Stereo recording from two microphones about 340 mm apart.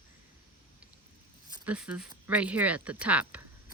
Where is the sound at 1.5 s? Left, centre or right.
Centre.